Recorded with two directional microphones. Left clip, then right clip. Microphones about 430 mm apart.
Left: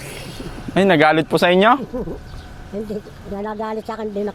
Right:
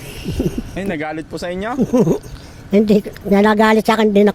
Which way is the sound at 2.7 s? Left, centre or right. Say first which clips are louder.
Right 14 dB; right.